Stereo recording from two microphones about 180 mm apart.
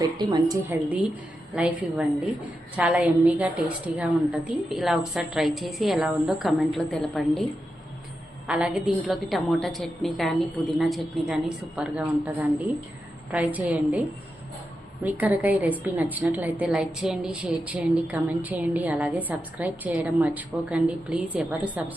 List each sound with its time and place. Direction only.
0.0 s a woman's voice: 20° right (ahead or behind)
1.5 s a woman's voice: 5° right (ahead or behind)
8.4 s a woman's voice: 5° right (ahead or behind)
15.0 s a woman's voice: 10° right (ahead or behind)